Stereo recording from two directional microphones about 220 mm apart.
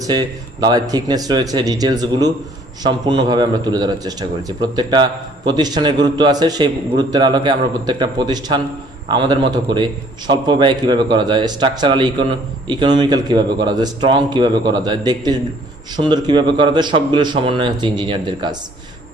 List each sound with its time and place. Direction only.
0.0 s a man's voice: 20° right (ahead or behind)